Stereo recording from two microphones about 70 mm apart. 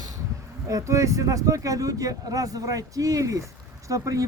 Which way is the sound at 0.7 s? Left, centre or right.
Right.